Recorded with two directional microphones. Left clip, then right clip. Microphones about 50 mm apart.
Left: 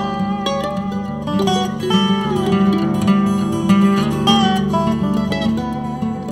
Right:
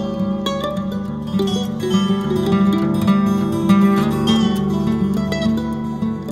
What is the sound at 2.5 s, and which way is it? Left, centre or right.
Music, left.